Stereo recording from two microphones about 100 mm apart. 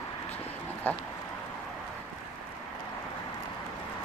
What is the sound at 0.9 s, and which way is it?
Speech, 20° left (ahead or behind).